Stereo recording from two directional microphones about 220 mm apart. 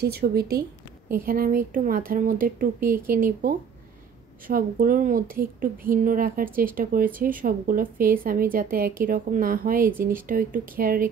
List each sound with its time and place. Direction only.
0.0 s a woman's voice: 45° right (ahead or behind)